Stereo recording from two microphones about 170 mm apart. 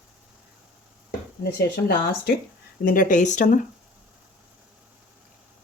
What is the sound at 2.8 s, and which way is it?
Speech, 55° left (ahead or behind).